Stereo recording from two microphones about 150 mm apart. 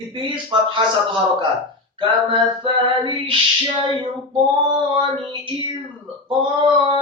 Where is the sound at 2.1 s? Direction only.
35° right (ahead or behind).